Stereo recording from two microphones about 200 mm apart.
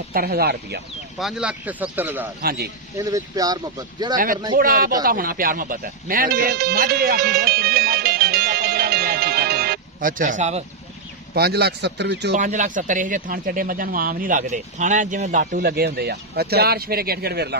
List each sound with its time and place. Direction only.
0.1 s speech: 50° right (ahead or behind)
1.2 s speech: 5° right (ahead or behind)
2.4 s speech: 50° right (ahead or behind)
3.0 s speech: 15° right (ahead or behind)
4.6 s speech: 45° right (ahead or behind)
5.0 s music: 45° right (ahead or behind)
11.3 s a man's voice: 50° right (ahead or behind)
12.4 s speech: 40° right (ahead or behind)